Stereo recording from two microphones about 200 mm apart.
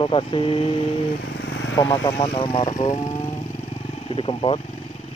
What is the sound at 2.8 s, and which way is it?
Speech, 35° left (ahead or behind).